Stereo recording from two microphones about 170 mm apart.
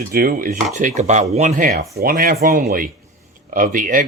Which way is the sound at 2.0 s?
55° right (ahead or behind).